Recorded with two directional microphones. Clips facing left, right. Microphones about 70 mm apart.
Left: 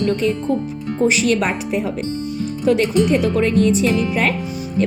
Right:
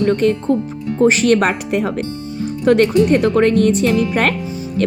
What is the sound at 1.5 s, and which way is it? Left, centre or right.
Speech, right.